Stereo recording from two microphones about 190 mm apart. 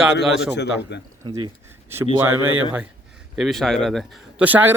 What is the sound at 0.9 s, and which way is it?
Speech, 65° left (ahead or behind).